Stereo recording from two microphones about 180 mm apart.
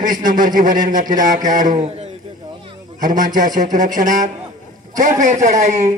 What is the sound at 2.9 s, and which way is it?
Speech, 45° right (ahead or behind).